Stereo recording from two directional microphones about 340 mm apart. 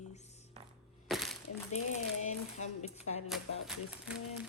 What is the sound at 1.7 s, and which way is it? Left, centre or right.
Speech, centre.